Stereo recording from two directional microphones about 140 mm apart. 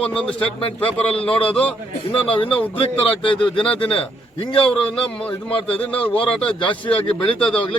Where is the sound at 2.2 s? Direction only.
40° left (ahead or behind).